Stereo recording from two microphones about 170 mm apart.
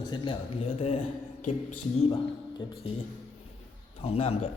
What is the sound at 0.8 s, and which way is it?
A man's voice, 40° left (ahead or behind).